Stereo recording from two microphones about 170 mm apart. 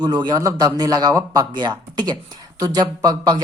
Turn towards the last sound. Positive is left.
turn(degrees=-25)  # may be behind; listen again after turning